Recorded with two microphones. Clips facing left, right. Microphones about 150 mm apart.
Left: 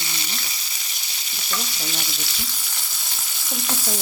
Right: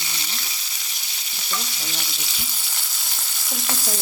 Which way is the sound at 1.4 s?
Centre (ahead or behind).